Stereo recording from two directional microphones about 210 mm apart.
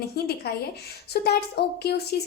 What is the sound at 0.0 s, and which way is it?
A woman's voice, 50° left (ahead or behind).